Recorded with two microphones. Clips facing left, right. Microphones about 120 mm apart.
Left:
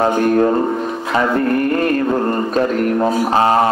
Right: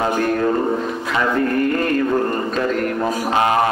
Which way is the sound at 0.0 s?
30° left (ahead or behind).